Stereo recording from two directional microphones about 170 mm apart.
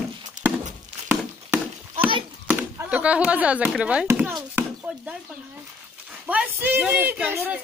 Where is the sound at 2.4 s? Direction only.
10° right (ahead or behind).